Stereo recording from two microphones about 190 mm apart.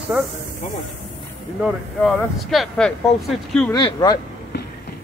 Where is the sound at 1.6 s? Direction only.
Centre (ahead or behind).